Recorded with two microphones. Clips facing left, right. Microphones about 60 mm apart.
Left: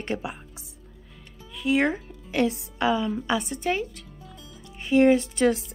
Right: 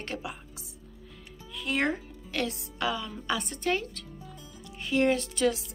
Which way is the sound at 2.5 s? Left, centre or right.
Left.